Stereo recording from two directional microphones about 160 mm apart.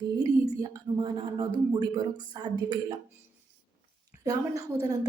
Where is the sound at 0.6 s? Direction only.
25° right (ahead or behind).